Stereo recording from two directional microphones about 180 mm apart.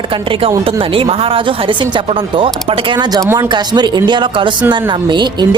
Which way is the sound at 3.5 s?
25° right (ahead or behind).